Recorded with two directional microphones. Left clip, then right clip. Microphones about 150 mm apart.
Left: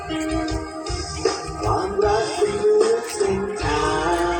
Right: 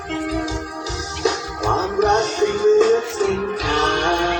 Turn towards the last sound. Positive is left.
turn(degrees=60)  # may be behind; listen again after turning